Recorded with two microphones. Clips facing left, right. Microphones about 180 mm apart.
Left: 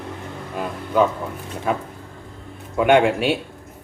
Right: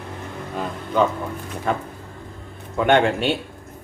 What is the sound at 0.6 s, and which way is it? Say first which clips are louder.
A man's voice: left 2 dB; 5° left (ahead or behind).